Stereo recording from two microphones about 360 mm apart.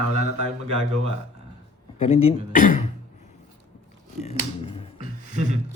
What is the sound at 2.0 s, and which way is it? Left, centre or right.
Speech, centre.